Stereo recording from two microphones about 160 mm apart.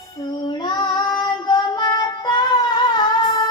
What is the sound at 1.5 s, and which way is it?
Female singing, 25° left (ahead or behind).